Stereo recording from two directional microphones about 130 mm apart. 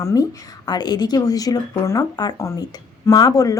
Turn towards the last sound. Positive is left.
turn(degrees=30)  # may be behind; listen again after turning